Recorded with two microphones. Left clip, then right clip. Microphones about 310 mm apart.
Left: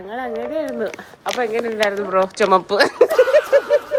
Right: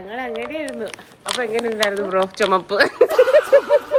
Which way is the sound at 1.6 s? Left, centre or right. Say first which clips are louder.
Even; centre.